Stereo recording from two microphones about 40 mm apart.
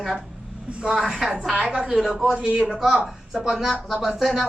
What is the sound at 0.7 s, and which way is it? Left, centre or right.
Speech, right.